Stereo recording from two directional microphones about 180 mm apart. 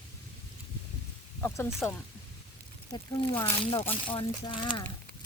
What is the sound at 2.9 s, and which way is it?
Speech, 25° left (ahead or behind).